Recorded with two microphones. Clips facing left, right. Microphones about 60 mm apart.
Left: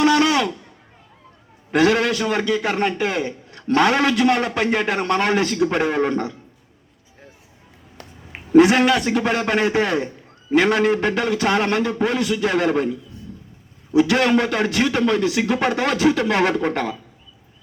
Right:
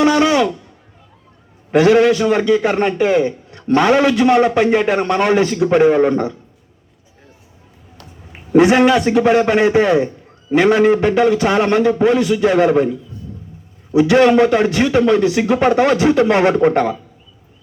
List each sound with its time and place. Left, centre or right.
0.0 s a sound: centre
1.7 s a man's voice: centre
8.5 s a man's voice: centre